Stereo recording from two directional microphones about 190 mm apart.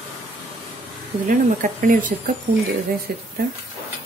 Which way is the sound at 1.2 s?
45° right (ahead or behind).